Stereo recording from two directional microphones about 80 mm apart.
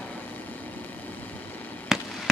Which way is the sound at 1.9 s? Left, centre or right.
Centre.